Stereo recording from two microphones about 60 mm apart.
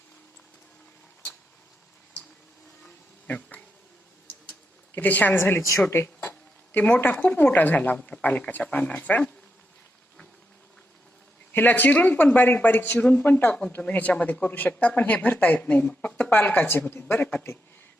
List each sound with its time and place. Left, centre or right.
3.2 s speech: left
4.9 s speech: left
6.7 s speech: left
11.5 s speech: left
17.3 s speech: left